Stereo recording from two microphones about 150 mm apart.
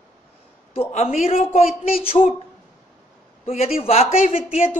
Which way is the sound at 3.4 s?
40° left (ahead or behind).